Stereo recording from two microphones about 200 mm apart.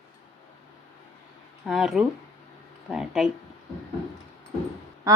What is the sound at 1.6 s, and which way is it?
Speech, centre (ahead or behind).